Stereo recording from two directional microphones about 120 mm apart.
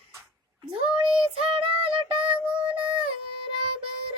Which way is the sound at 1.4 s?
50° right (ahead or behind).